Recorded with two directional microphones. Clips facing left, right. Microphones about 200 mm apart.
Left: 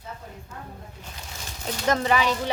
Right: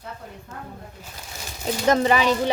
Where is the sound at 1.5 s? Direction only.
10° right (ahead or behind).